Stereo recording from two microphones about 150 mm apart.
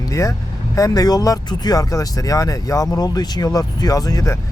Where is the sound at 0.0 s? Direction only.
20° left (ahead or behind).